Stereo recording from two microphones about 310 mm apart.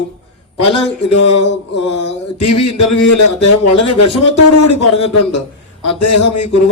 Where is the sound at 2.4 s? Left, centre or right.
Left.